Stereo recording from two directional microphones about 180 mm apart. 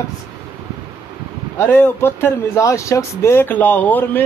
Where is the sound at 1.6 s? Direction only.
10° left (ahead or behind).